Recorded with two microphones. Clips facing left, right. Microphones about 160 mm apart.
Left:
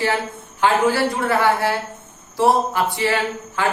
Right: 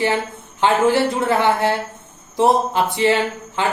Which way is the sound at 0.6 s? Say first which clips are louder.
Right 2 dB; 20° right (ahead or behind).